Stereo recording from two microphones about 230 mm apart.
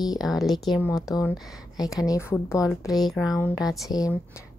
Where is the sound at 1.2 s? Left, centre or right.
Centre.